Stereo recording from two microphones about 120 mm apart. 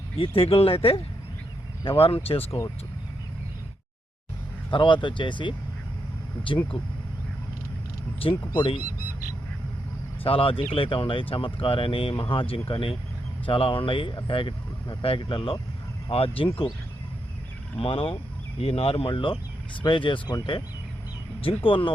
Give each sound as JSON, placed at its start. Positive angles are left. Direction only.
{"t": 0.2, "sound": "speech", "side_deg": 55}
{"t": 4.7, "sound": "speech", "side_deg": 45}
{"t": 8.2, "sound": "speech", "side_deg": 45}
{"t": 10.2, "sound": "speech", "side_deg": 50}
{"t": 17.7, "sound": "speech", "side_deg": 50}
{"t": 21.4, "sound": "speech", "side_deg": 50}